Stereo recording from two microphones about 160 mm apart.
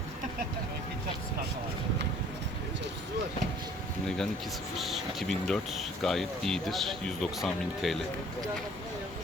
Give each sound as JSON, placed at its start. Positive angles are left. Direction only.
{"t": 4.8, "sound": "speech", "side_deg": 0}